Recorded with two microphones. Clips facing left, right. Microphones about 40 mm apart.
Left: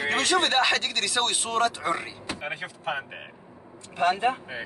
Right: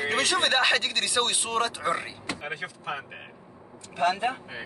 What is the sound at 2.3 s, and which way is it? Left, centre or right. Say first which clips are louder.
Speech: left 1 dB; centre.